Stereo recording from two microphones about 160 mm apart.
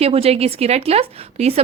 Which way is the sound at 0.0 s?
40° right (ahead or behind).